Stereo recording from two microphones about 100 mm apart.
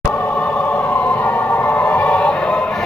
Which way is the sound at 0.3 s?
15° left (ahead or behind).